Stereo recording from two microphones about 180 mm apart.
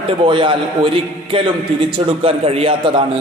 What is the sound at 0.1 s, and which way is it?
A man's voice, 30° right (ahead or behind).